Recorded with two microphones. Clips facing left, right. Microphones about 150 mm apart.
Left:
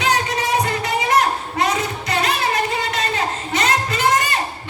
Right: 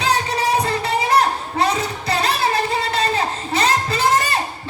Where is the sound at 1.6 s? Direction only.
30° right (ahead or behind).